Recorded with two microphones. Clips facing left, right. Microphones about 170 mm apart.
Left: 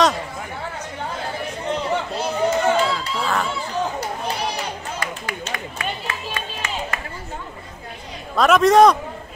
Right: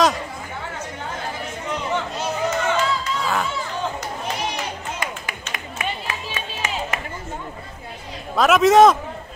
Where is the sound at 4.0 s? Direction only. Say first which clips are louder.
Left 2 dB; 35° left (ahead or behind).